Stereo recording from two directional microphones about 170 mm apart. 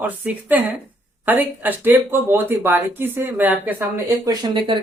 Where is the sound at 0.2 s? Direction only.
10° right (ahead or behind).